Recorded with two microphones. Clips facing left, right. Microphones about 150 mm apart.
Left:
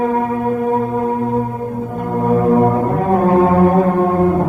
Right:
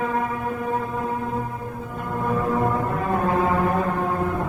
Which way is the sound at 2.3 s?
40° left (ahead or behind).